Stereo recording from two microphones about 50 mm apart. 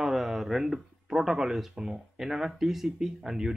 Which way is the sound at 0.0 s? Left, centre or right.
Centre.